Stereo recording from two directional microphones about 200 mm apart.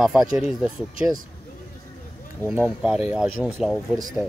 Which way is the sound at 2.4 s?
10° right (ahead or behind).